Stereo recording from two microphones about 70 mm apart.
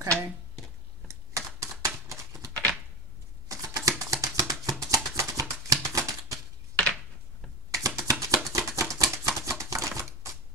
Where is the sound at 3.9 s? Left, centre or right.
Right.